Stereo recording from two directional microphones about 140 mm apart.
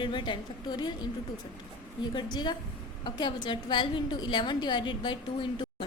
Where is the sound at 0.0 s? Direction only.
35° left (ahead or behind).